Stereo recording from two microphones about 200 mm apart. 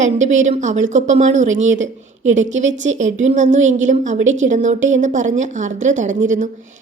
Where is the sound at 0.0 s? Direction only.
35° right (ahead or behind).